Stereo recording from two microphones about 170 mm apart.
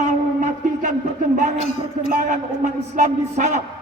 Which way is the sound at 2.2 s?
50° right (ahead or behind).